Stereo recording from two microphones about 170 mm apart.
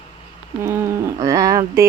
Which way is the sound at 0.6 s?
20° right (ahead or behind).